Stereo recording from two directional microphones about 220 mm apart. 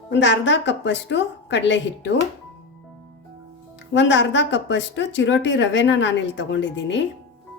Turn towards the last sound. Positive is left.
turn(degrees=55)  # may be behind; listen again after turning